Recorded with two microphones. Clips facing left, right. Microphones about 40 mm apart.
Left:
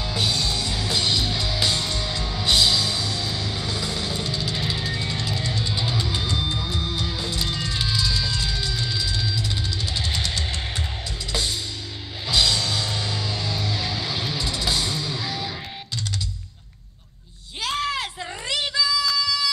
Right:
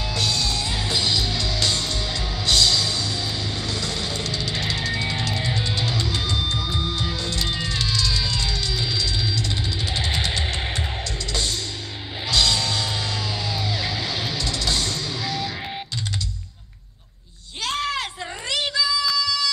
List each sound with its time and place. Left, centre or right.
0.1 s music: centre
0.7 s music: centre
0.9 s music: centre
2.4 s music: centre
5.0 s music: centre
5.8 s music: centre
6.7 s music: centre
7.4 s music: centre
7.7 s music: centre
8.2 s music: centre
9.9 s music: centre
12.3 s music: centre
14.4 s music: centre
17.6 s a sound: centre